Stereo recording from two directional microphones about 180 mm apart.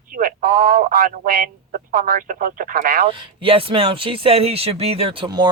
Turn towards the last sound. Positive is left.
turn(degrees=-25)  # may be behind; listen again after turning